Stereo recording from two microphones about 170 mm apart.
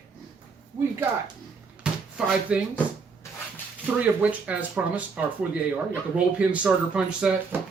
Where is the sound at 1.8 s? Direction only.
5° right (ahead or behind).